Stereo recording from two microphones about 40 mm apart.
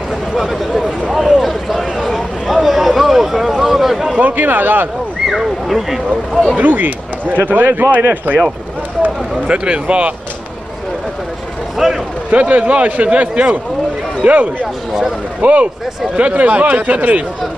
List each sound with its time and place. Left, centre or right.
0.3 s speech: centre
1.4 s a sound: centre
4.2 s speech: right
5.7 s speech: centre
6.5 s speech: right
9.5 s speech: right
11.8 s speech: centre
12.3 s a man's voice: right